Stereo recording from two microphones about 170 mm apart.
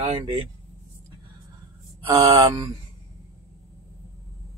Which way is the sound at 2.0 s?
20° right (ahead or behind).